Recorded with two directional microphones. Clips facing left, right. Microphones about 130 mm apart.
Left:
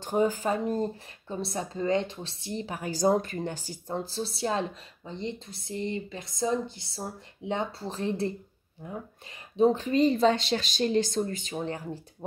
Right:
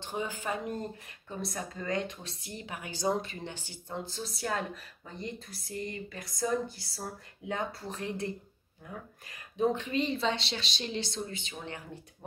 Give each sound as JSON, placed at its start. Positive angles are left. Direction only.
{"t": 0.0, "sound": "speech", "side_deg": 40}
{"t": 9.6, "sound": "speech", "side_deg": 35}